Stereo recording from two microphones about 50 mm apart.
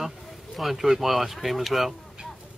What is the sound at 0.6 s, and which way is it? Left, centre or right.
Speech, centre.